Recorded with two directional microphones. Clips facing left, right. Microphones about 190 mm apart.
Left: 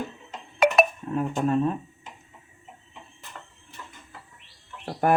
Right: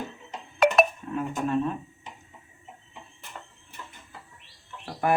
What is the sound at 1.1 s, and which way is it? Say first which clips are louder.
Speech: left 4 dB; 35° left (ahead or behind).